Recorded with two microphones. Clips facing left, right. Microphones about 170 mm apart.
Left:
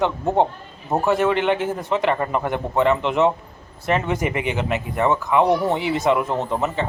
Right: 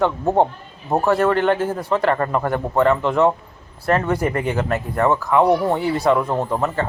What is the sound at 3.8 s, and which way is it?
Speech, 15° left (ahead or behind).